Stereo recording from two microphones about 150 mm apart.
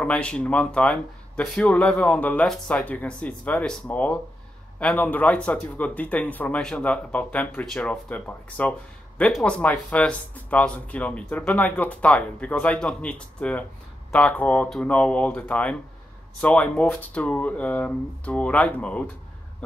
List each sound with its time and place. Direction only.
0.0 s speech: 5° left (ahead or behind)